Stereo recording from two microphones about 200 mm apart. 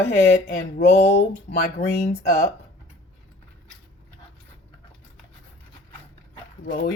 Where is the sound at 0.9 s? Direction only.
35° left (ahead or behind).